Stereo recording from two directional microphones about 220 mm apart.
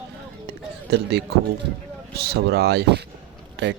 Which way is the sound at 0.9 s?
50° right (ahead or behind).